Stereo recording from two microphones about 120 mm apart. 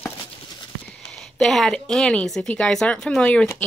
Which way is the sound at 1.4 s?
5° left (ahead or behind).